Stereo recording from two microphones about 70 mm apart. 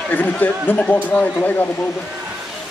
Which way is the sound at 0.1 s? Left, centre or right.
Left.